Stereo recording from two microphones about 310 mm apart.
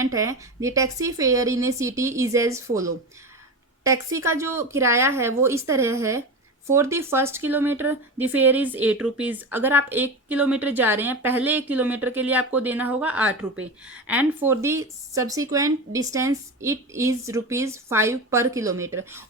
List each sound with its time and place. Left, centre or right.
0.0 s a woman's voice: centre